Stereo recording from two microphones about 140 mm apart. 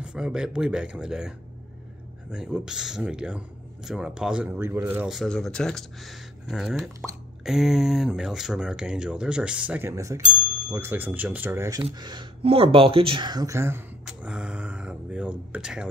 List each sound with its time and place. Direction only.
0.0 s speech: 5° right (ahead or behind)
2.3 s speech: 5° right (ahead or behind)
5.1 s speech: 5° left (ahead or behind); by 11.8 s 20° right (ahead or behind)
11.8 s speech: 30° right (ahead or behind)
14.0 s speech: 5° right (ahead or behind)